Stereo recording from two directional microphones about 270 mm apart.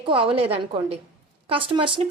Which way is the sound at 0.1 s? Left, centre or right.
Centre.